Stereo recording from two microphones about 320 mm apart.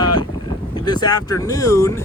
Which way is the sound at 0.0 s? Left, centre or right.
Centre.